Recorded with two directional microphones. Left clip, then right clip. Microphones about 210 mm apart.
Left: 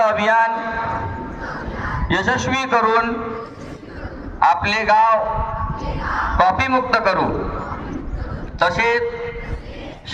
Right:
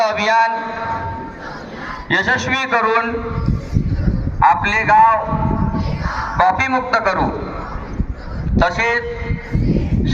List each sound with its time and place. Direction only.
0.0 s a sound: 40° left (ahead or behind)
2.0 s a man's voice: 55° left (ahead or behind)
4.4 s a man's voice: 60° left (ahead or behind)
6.3 s a man's voice: 60° left (ahead or behind)
8.5 s a man's voice: 50° left (ahead or behind)